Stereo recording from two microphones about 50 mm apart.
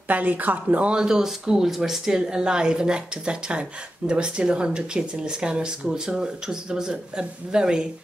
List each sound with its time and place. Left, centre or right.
0.1 s speech: right
1.0 s speech: centre